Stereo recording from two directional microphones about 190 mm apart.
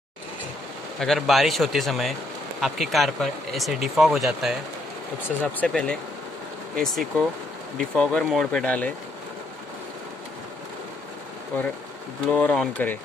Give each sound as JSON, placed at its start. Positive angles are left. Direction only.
{"t": 0.9, "sound": "speech", "side_deg": 0}
{"t": 5.6, "sound": "speech", "side_deg": 5}
{"t": 12.3, "sound": "speech", "side_deg": 5}